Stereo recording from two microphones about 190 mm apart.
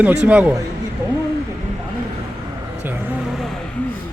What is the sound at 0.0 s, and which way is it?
Speech, 10° right (ahead or behind).